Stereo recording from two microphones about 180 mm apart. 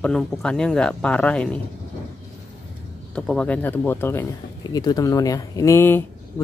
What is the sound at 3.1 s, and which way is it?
Speech, 5° left (ahead or behind).